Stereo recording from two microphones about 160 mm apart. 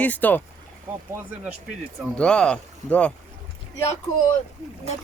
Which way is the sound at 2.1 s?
5° left (ahead or behind).